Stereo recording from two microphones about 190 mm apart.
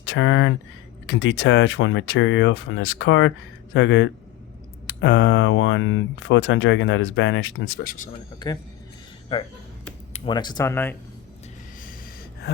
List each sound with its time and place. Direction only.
0.0 s speech: 90° left
7.9 s speech: 40° left (ahead or behind)
8.4 s a man's voice: 25° left (ahead or behind)